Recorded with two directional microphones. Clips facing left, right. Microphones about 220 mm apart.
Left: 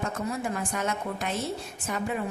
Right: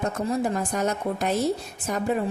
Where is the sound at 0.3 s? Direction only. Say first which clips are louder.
Right 5 dB; 40° right (ahead or behind).